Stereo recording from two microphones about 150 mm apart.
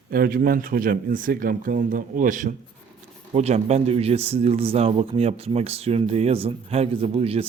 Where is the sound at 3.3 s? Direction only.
45° right (ahead or behind).